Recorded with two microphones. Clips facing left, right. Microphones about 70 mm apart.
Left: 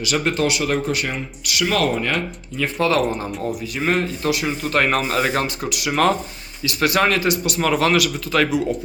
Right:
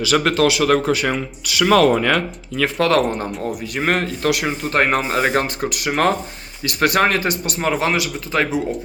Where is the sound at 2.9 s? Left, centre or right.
Right.